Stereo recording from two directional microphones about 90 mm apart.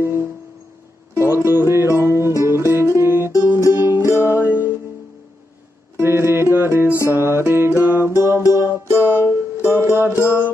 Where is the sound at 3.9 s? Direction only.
35° left (ahead or behind).